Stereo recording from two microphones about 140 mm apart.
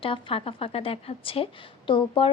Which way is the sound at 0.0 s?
40° left (ahead or behind).